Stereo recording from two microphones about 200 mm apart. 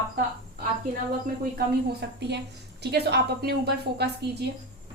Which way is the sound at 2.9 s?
55° right (ahead or behind).